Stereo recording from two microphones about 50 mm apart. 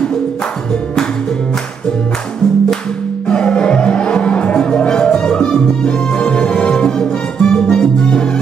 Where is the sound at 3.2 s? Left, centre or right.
Centre.